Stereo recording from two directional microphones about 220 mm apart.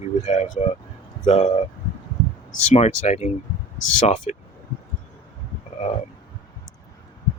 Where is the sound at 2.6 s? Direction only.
30° left (ahead or behind).